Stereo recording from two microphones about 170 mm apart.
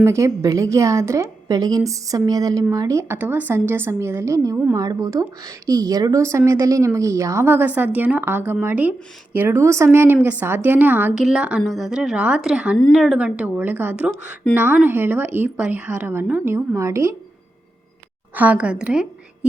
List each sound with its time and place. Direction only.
0.0 s a woman's voice: 15° right (ahead or behind)
18.3 s a woman's voice: 10° right (ahead or behind)